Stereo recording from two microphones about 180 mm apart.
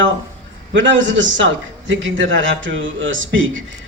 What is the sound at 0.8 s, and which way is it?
Speech, 90° right.